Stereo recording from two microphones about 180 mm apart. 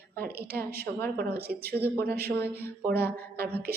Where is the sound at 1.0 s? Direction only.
60° right (ahead or behind).